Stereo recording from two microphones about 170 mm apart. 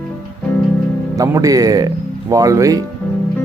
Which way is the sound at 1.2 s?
20° right (ahead or behind).